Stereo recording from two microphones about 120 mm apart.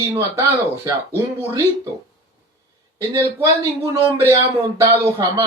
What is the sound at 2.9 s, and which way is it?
Speech, 25° right (ahead or behind).